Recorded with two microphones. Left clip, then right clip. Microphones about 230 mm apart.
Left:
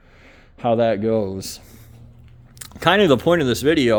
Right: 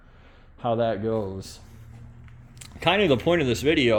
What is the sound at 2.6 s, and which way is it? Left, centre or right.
Speech, left.